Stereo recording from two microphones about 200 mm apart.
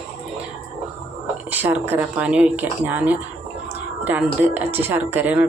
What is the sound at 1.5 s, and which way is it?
Speech, 10° right (ahead or behind).